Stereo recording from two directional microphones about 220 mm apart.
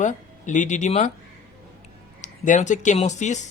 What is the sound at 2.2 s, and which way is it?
A woman's voice, 35° left (ahead or behind).